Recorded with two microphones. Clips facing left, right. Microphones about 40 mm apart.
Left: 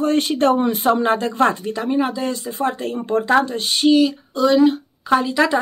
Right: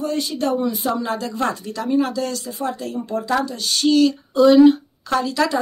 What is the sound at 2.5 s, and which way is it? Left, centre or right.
Speech, left.